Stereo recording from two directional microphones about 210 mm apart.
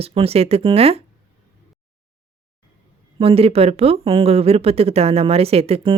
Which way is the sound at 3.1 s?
25° right (ahead or behind).